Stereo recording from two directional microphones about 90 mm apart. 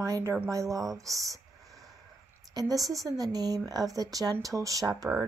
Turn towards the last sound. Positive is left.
turn(degrees=-40)  # may be behind; listen again after turning